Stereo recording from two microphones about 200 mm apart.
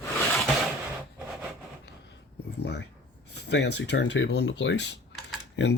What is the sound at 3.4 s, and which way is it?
Speech, 60° left (ahead or behind).